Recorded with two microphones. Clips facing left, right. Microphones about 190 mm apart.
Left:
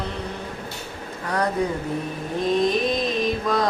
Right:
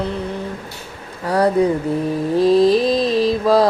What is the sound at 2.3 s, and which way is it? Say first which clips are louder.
Mantra: right 8 dB; 35° right (ahead or behind).